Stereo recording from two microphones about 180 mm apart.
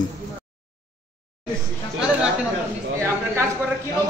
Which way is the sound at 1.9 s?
5° right (ahead or behind).